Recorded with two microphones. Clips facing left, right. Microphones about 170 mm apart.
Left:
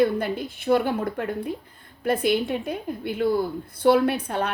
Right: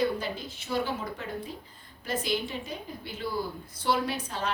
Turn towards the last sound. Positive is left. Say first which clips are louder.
# left 8 dB
turn(degrees=60)  # may be behind; listen again after turning